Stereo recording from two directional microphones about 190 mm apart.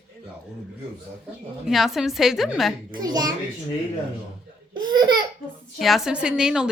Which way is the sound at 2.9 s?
20° right (ahead or behind).